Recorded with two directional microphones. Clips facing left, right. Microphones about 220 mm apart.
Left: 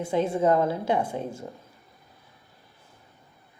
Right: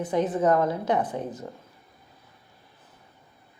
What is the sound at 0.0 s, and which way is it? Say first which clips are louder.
Speech: even; 25° left (ahead or behind).